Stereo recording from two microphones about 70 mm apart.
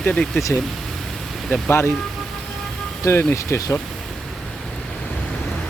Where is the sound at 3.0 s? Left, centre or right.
Left.